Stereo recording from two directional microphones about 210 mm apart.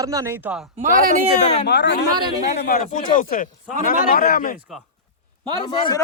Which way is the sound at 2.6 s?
45° left (ahead or behind).